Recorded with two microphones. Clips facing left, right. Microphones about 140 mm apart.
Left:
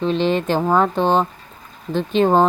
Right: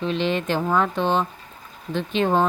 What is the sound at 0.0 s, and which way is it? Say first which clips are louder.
Speech: left 5 dB; 35° left (ahead or behind).